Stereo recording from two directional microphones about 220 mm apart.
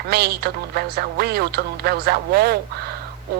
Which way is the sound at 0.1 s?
45° right (ahead or behind).